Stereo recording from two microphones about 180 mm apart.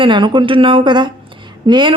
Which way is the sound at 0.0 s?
25° right (ahead or behind).